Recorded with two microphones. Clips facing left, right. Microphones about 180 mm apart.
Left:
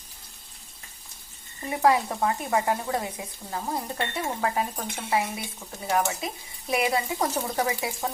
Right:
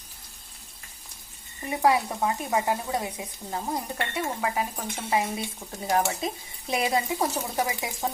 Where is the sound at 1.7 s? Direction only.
15° right (ahead or behind).